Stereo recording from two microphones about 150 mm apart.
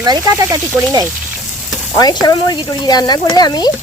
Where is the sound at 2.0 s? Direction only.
25° left (ahead or behind).